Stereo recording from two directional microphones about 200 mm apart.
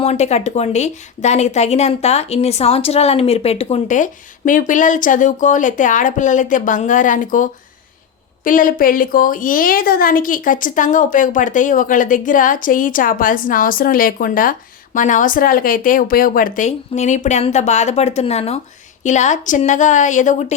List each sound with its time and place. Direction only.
0.0 s a woman's voice: 35° left (ahead or behind)